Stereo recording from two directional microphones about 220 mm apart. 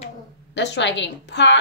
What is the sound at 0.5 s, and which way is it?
A woman's voice, 50° left (ahead or behind).